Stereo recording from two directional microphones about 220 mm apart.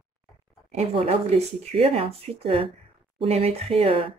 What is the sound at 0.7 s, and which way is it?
Speech, 25° right (ahead or behind).